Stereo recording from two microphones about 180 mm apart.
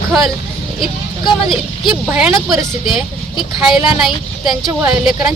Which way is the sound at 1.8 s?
Centre (ahead or behind).